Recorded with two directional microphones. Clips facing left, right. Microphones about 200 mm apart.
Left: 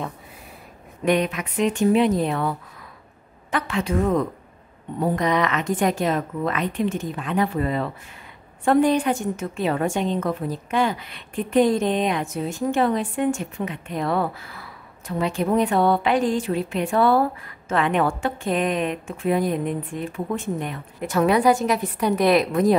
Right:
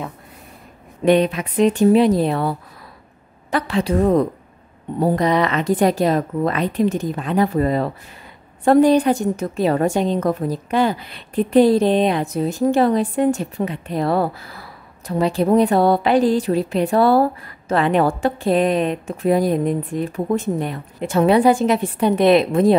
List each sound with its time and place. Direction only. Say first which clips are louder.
1.0 s a woman's voice: right 6 dB; 30° right (ahead or behind)